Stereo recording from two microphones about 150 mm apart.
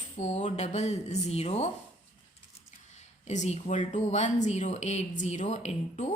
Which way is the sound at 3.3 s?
50° left (ahead or behind).